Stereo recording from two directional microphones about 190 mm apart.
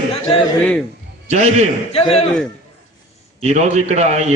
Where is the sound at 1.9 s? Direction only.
30° left (ahead or behind).